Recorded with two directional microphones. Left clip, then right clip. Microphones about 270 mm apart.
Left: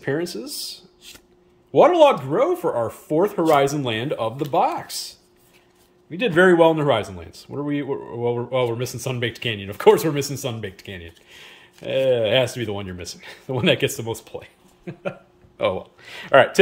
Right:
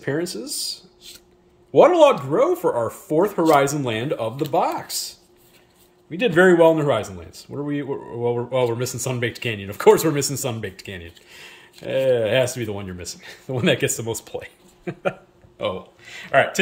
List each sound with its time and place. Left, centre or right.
0.0 s speech: centre
16.0 s speech: left